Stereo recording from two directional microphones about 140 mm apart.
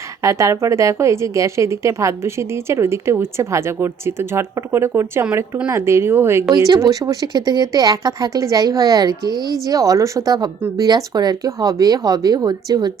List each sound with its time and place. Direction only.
0.2 s a woman's voice: 20° right (ahead or behind)
6.5 s a woman's voice: 30° right (ahead or behind)